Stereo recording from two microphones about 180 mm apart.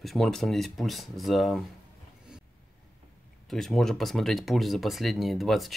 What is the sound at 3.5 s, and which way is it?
Speech, centre (ahead or behind).